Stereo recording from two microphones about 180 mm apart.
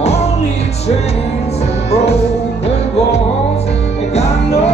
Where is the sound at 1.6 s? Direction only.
35° left (ahead or behind).